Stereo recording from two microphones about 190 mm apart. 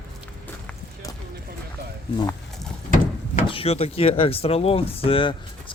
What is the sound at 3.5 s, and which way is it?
Speech, 30° left (ahead or behind).